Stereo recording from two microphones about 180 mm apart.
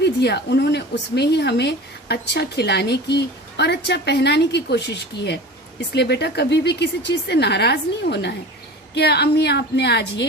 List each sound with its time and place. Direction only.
0.0 s speech: 65° left (ahead or behind)